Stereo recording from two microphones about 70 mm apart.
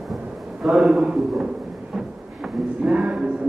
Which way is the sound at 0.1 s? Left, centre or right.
Centre.